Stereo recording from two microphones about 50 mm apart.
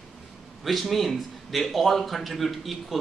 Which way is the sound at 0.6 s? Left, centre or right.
Centre.